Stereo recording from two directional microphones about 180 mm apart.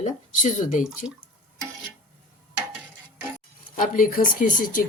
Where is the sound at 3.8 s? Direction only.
50° left (ahead or behind).